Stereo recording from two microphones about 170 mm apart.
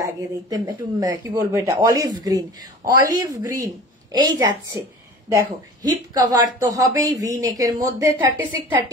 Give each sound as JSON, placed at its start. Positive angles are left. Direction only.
{"t": 0.0, "sound": "a woman's voice", "side_deg": -20}